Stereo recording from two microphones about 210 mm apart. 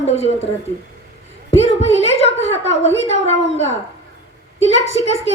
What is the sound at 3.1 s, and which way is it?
Speech, 30° left (ahead or behind).